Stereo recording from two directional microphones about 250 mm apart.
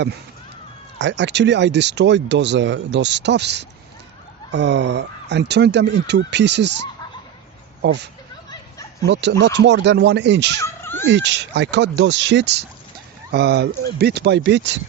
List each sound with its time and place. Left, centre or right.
0.9 s speech: right
9.0 s speech: right
10.6 s cat: centre
11.0 s speech: right